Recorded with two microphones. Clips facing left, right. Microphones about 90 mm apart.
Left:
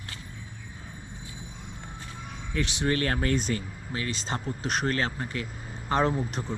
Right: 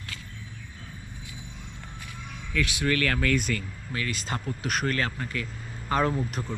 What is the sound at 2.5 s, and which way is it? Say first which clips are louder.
Speech: right 1 dB; 30° left (ahead or behind).